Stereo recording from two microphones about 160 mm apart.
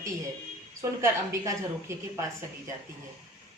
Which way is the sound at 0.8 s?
20° right (ahead or behind).